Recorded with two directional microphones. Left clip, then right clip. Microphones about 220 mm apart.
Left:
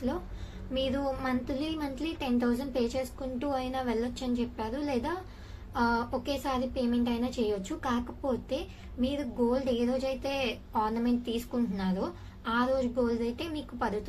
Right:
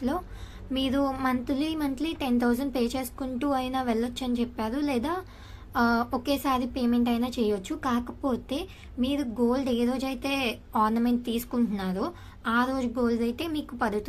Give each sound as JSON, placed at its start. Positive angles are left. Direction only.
{"t": 0.7, "sound": "a woman's voice", "side_deg": -30}